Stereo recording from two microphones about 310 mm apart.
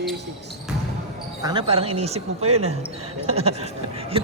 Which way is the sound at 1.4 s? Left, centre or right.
Centre.